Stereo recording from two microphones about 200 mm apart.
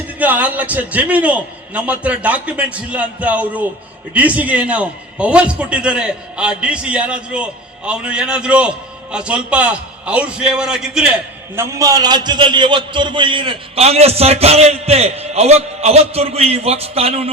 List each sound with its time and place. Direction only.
0.2 s a man's voice: 10° right (ahead or behind); by 17.2 s 30° right (ahead or behind)